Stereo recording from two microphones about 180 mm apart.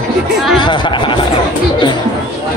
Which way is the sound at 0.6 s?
25° left (ahead or behind).